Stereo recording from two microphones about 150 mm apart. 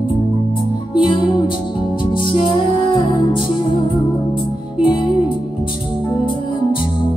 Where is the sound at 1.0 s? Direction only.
35° left (ahead or behind).